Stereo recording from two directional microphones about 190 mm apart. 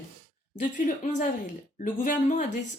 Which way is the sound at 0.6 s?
40° left (ahead or behind).